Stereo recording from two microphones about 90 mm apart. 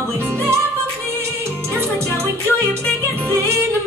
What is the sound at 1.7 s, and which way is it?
Music, 30° right (ahead or behind).